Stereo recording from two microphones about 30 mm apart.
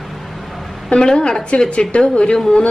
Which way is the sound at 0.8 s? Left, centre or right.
Left.